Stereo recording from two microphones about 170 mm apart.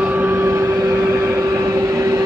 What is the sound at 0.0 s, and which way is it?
Vehicle, 10° right (ahead or behind).